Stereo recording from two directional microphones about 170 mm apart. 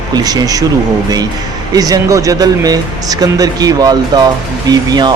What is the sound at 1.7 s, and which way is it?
Speech, 20° right (ahead or behind).